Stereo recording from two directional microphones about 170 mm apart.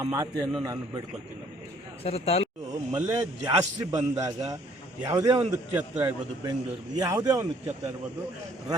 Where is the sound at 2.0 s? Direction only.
35° left (ahead or behind).